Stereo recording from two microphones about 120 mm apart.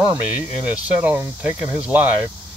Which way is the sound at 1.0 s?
15° right (ahead or behind).